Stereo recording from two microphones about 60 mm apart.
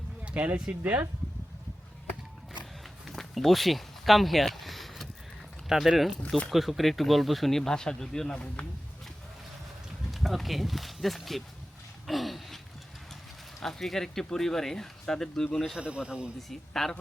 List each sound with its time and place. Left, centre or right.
0.2 s speech: right
3.1 s a sound: centre
5.6 s speech: centre
10.1 s speech: centre
12.0 s a sound: centre
13.6 s speech: centre
15.8 s a man's voice: centre
16.5 s speech: centre